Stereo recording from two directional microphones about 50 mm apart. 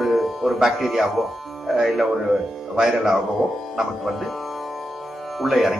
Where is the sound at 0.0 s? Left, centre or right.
Centre.